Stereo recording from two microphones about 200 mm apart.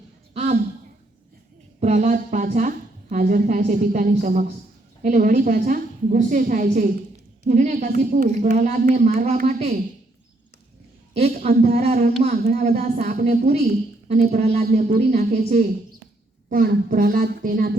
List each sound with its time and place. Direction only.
0.3 s a sound: 35° right (ahead or behind)
1.8 s a woman's voice: 35° right (ahead or behind)
11.1 s a woman's voice: 35° right (ahead or behind)